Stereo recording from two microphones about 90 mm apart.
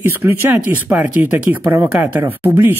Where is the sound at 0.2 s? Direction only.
30° right (ahead or behind).